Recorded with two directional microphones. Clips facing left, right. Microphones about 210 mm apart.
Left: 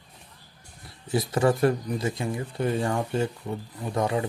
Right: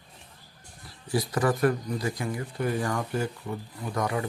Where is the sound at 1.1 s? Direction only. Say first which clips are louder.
Left 3 dB; 25° left (ahead or behind).